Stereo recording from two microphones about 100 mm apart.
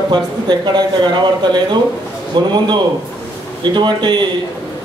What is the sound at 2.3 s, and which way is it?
Speech, 50° right (ahead or behind).